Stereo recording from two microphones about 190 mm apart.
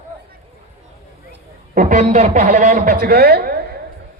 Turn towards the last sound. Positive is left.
turn(degrees=-55)  # may be behind; listen again after turning